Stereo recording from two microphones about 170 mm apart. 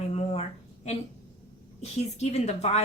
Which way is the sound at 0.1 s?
40° left (ahead or behind).